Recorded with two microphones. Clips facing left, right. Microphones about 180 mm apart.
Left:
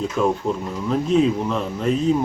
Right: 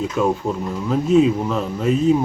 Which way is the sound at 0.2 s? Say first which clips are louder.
Right 1 dB; 5° right (ahead or behind).